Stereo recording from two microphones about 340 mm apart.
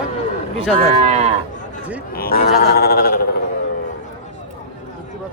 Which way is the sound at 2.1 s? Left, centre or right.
Left.